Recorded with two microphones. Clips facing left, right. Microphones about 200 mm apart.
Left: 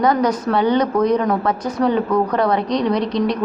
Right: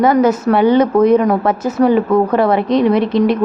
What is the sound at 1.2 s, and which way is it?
A woman's voice, 25° right (ahead or behind).